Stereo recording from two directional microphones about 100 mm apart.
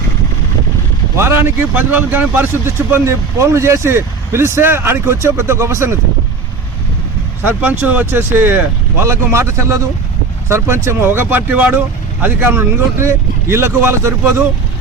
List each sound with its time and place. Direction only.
1.1 s speech: 25° right (ahead or behind)
7.4 s speech: 15° right (ahead or behind)